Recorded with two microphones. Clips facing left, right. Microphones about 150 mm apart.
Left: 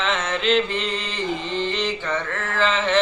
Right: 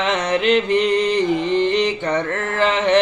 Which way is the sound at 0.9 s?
65° right (ahead or behind).